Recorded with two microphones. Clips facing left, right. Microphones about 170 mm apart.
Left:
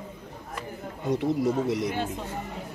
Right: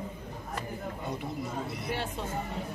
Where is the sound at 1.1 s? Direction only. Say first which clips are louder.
Left 11 dB; 80° left.